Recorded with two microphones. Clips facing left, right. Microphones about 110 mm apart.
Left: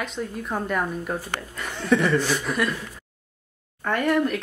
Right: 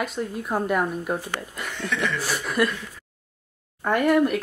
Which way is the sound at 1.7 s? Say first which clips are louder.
Left 7 dB; 35° left (ahead or behind).